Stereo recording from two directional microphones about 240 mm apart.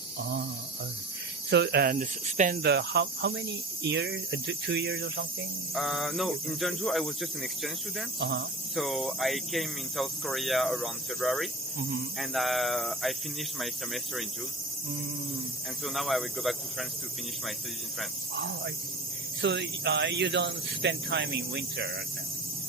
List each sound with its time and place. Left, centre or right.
1.5 s speech: right
5.7 s speech: centre
8.2 s speech: right
8.7 s speech: centre
15.8 s speech: centre
18.3 s speech: right